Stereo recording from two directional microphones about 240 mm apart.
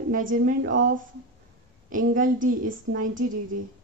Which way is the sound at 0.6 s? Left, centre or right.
Right.